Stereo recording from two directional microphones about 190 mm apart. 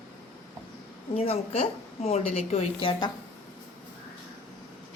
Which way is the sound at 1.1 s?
30° left (ahead or behind).